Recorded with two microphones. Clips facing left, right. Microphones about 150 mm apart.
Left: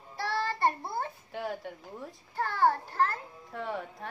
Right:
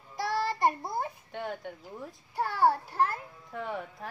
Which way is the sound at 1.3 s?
Centre (ahead or behind).